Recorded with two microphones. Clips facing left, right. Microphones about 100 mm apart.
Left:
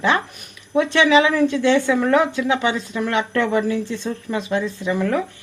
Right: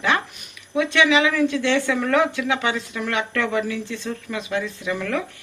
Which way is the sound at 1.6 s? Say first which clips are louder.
Left 4 dB; 15° left (ahead or behind).